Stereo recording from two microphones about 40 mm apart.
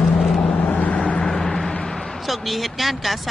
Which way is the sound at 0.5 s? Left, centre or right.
Left.